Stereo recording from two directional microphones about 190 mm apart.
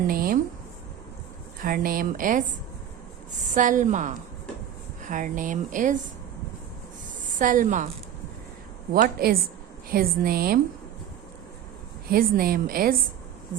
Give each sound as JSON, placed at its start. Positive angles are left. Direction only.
{"t": 0.1, "sound": "speech", "side_deg": -50}
{"t": 1.6, "sound": "speech", "side_deg": -50}
{"t": 3.5, "sound": "a woman's voice", "side_deg": -40}
{"t": 7.3, "sound": "speech", "side_deg": -45}
{"t": 8.9, "sound": "speech", "side_deg": -50}
{"t": 12.0, "sound": "speech", "side_deg": -50}